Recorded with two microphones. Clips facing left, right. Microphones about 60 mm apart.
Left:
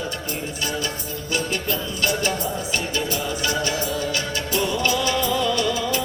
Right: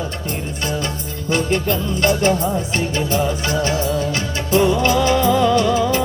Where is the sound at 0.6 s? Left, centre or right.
Right.